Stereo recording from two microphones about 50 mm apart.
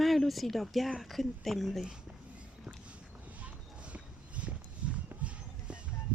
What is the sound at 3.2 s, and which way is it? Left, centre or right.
Clip-clop, right.